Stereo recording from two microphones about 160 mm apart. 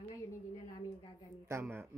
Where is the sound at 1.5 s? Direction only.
15° right (ahead or behind).